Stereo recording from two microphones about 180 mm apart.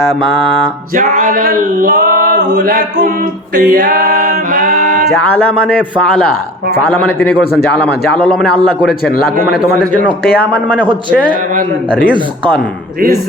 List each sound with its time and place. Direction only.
0.9 s male singing: 45° right (ahead or behind)
3.5 s a sound: 50° right (ahead or behind)
5.6 s a man's voice: centre (ahead or behind)